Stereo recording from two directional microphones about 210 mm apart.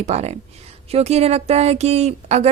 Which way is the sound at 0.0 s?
30° right (ahead or behind).